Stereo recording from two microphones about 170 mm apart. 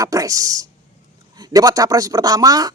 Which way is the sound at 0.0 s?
20° right (ahead or behind).